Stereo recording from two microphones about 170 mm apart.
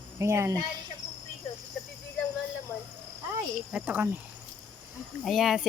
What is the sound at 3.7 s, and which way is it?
Speech, 10° right (ahead or behind).